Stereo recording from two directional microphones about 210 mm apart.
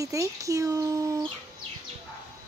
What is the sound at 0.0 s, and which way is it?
Speech, 15° right (ahead or behind).